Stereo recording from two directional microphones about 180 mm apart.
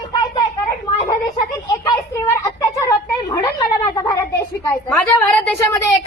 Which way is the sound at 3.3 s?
20° left (ahead or behind).